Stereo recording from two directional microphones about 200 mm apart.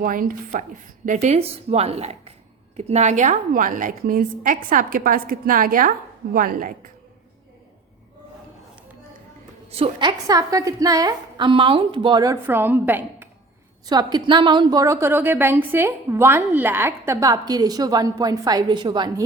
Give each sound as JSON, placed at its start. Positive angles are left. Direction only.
{"t": 0.0, "sound": "a woman's voice", "side_deg": -45}
{"t": 9.6, "sound": "a woman's voice", "side_deg": -30}
{"t": 13.8, "sound": "a woman's voice", "side_deg": -20}